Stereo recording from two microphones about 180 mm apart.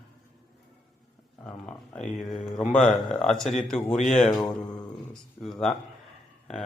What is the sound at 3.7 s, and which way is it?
Speech, 40° left (ahead or behind).